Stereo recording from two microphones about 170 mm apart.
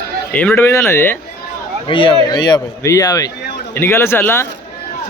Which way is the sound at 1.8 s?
30° left (ahead or behind).